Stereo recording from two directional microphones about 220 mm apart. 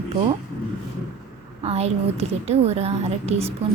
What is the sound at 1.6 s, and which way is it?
A woman's voice, 30° right (ahead or behind).